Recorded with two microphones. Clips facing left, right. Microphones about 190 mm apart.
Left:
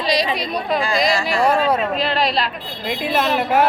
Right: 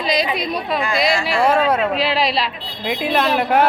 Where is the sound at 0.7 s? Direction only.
30° left (ahead or behind).